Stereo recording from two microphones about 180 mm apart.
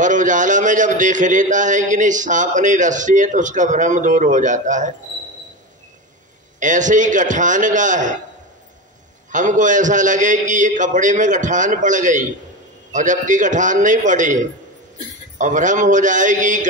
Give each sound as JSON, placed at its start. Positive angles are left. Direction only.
{"t": 0.0, "sound": "a man's voice", "side_deg": -45}
{"t": 6.6, "sound": "a man's voice", "side_deg": -45}
{"t": 9.3, "sound": "a man's voice", "side_deg": -45}